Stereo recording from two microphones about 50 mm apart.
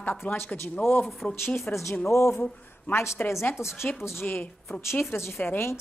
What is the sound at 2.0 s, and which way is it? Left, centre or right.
Speech, left.